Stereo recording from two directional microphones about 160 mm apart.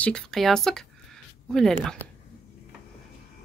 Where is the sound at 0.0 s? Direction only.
5° left (ahead or behind).